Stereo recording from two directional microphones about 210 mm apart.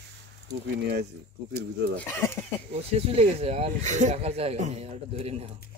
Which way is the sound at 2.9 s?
30° right (ahead or behind).